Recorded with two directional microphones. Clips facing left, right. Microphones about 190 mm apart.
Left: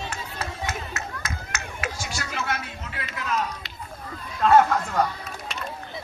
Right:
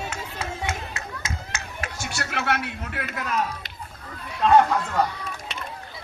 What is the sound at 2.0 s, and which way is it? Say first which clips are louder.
A man's voice: right 2 dB; 65° right (ahead or behind).